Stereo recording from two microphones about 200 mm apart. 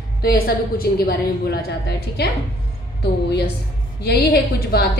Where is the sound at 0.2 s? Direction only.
50° left (ahead or behind).